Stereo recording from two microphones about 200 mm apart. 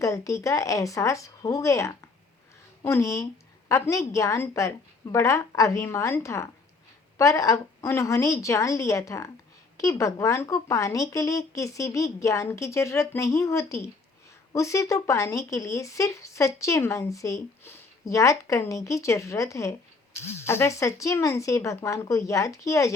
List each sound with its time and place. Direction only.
0.0 s speech: 15° left (ahead or behind)